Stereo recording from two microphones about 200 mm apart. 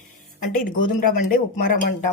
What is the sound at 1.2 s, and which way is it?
Speech, 45° left (ahead or behind).